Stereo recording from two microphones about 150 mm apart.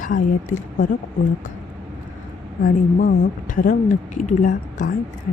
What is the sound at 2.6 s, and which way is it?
A woman's voice, 60° left (ahead or behind).